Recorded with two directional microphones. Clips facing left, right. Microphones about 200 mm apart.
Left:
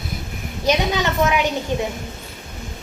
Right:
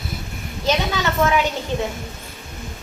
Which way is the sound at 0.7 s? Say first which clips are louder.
Left 2 dB; 15° left (ahead or behind).